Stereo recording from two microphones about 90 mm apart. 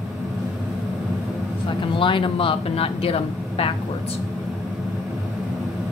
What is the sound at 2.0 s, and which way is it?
Speech, 70° left (ahead or behind).